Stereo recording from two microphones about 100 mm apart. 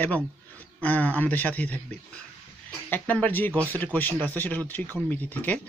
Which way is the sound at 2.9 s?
15° left (ahead or behind).